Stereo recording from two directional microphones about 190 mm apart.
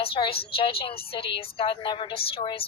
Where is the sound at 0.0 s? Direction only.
30° left (ahead or behind).